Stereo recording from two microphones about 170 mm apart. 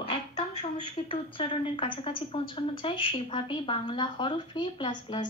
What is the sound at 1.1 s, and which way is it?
A woman's voice, 30° left (ahead or behind).